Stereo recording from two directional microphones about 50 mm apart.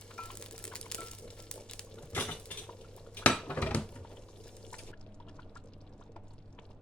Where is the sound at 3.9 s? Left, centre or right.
Centre.